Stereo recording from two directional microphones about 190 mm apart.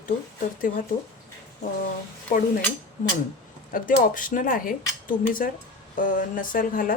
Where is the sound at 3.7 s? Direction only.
45° left (ahead or behind).